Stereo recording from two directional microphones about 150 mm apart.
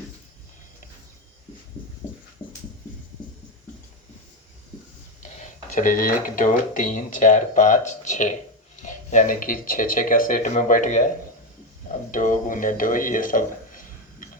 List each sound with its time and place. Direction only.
5.3 s speech: 50° left (ahead or behind)